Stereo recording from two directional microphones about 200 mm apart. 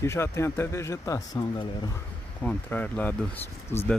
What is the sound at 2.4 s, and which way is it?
Speech, 10° left (ahead or behind).